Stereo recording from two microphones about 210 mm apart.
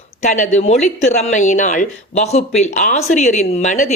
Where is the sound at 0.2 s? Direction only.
35° left (ahead or behind).